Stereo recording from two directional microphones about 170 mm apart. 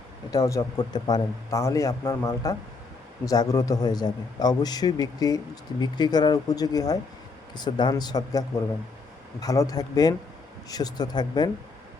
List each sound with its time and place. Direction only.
0.3 s a man's voice: 20° left (ahead or behind)